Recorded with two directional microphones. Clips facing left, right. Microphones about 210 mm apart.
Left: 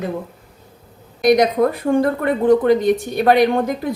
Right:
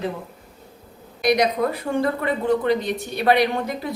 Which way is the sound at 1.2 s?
50° left (ahead or behind).